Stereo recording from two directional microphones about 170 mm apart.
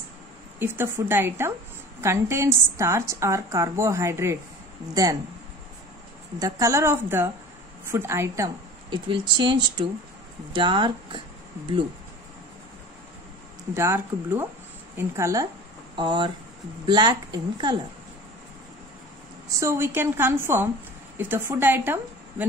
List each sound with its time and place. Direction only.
0.6 s a woman's voice: 15° right (ahead or behind)
6.4 s a woman's voice: 20° right (ahead or behind)
8.9 s speech: 25° right (ahead or behind)
13.7 s a woman's voice: 15° right (ahead or behind)
16.0 s speech: 30° right (ahead or behind)
19.6 s a woman's voice: 15° right (ahead or behind)